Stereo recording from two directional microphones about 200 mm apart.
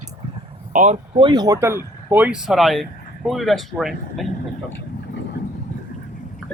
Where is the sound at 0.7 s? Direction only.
40° right (ahead or behind).